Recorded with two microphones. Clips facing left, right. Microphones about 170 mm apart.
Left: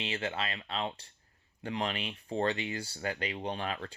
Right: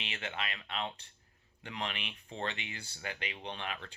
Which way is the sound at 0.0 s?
35° left (ahead or behind).